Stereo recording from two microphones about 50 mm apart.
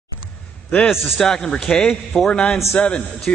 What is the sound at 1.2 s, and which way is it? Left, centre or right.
A man's voice, centre.